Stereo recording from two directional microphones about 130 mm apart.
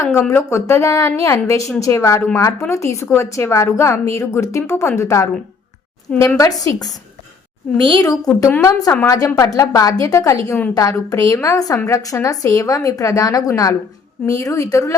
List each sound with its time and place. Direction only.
0.0 s a woman's voice: 20° left (ahead or behind)
7.9 s a woman's voice: 30° left (ahead or behind)
8.4 s a woman's voice: 15° left (ahead or behind)
9.0 s a woman's voice: 30° left (ahead or behind)